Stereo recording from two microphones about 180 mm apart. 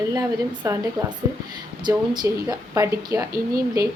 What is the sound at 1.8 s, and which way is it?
A woman's voice, 25° right (ahead or behind).